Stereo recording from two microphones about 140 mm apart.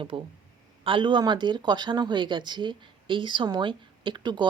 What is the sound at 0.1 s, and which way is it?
A woman's voice, 35° right (ahead or behind).